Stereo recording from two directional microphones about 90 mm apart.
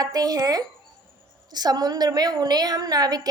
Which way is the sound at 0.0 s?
45° right (ahead or behind).